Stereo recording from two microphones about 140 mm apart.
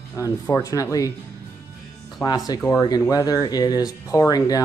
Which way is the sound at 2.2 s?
25° left (ahead or behind).